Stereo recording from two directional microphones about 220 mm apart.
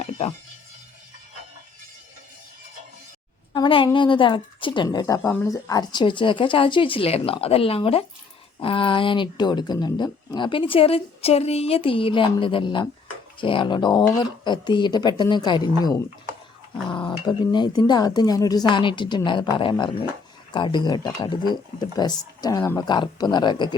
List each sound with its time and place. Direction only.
3.5 s a woman's voice: 20° left (ahead or behind)